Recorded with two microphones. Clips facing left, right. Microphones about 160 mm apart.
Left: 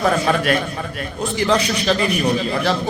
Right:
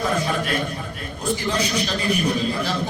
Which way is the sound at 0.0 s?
75° left (ahead or behind).